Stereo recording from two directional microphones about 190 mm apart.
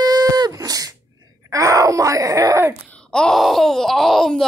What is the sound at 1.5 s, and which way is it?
Speech, 15° right (ahead or behind).